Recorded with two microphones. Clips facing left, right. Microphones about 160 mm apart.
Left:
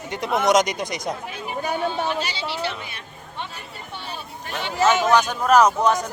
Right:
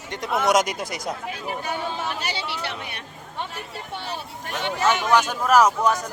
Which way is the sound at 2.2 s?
60° right (ahead or behind).